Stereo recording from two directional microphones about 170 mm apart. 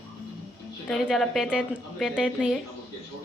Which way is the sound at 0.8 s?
Centre (ahead or behind).